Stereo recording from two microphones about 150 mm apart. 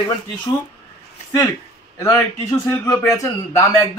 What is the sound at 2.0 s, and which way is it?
A man's voice, 20° left (ahead or behind).